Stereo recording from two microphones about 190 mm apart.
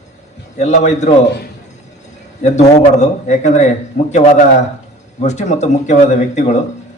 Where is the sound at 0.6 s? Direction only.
35° left (ahead or behind).